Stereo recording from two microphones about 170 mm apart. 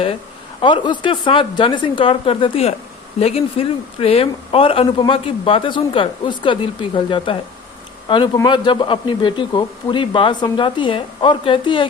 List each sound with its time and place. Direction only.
0.6 s a man's voice: 30° left (ahead or behind)